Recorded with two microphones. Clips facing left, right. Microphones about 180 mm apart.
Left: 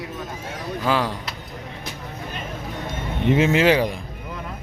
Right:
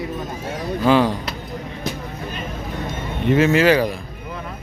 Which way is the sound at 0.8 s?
Centre (ahead or behind).